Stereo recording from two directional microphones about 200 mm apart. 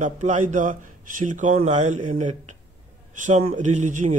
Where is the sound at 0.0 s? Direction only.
40° right (ahead or behind).